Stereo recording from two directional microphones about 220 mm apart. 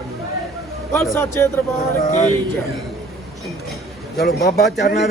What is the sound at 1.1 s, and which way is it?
Music, 10° left (ahead or behind).